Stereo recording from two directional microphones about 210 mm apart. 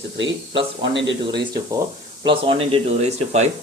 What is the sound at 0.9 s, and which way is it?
Speech, 55° right (ahead or behind).